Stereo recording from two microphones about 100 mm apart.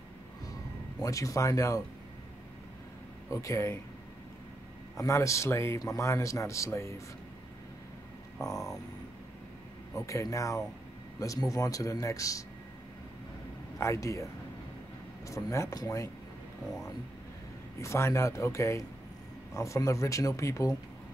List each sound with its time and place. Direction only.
1.0 s a man's voice: 35° left (ahead or behind)
3.3 s a man's voice: 30° left (ahead or behind)
4.9 s a man's voice: 30° left (ahead or behind)
8.4 s a man's voice: 35° left (ahead or behind)
9.9 s a man's voice: 30° left (ahead or behind)
13.7 s a man's voice: 30° left (ahead or behind)
15.2 s a man's voice: 30° left (ahead or behind)
17.7 s a man's voice: 30° left (ahead or behind)